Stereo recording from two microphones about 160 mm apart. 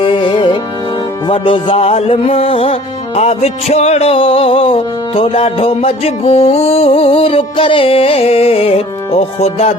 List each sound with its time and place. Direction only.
0.0 s music: 30° left (ahead or behind)